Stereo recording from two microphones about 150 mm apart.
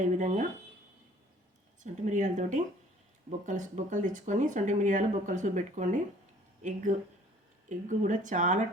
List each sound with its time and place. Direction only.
0.0 s speech: 55° right (ahead or behind)
1.8 s speech: 55° right (ahead or behind)